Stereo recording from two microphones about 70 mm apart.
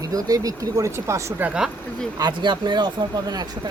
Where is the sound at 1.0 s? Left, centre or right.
Right.